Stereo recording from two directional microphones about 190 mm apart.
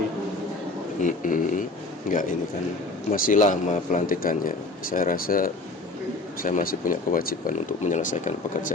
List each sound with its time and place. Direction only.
1.0 s speech: 45° left (ahead or behind)